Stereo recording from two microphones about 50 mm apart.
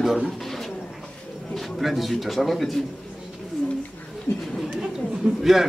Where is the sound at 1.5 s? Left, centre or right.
Centre.